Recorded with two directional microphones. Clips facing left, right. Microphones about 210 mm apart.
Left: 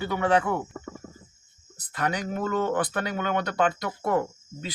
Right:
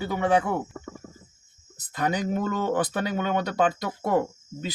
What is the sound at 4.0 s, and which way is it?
Speech, 20° right (ahead or behind).